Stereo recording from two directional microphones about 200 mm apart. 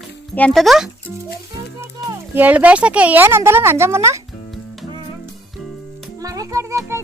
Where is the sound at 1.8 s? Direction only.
10° right (ahead or behind).